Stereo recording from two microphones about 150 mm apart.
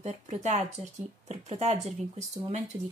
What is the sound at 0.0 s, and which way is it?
Speech, 50° right (ahead or behind).